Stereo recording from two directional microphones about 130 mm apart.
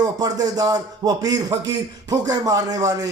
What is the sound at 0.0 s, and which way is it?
A man's voice, 30° right (ahead or behind).